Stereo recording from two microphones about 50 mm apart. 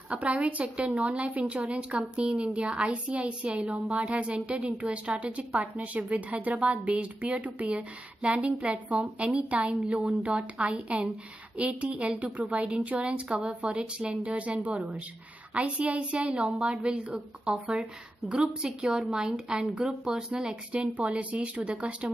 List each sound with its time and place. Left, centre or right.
0.1 s a woman's voice: right
20.7 s a woman's voice: right